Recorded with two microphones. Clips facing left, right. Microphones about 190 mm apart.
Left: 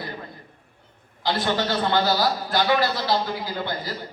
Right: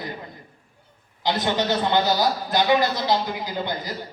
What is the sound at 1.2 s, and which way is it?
A man's voice, 20° right (ahead or behind).